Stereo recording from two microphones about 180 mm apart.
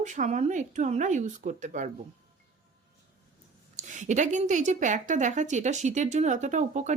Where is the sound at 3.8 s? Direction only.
45° right (ahead or behind).